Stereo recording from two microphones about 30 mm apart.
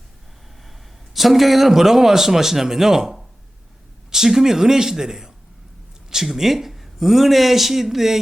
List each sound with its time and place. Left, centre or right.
1.1 s speech: centre
4.1 s speech: centre